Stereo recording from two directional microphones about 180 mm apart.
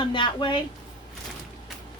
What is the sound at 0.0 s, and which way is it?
Speech, 25° left (ahead or behind).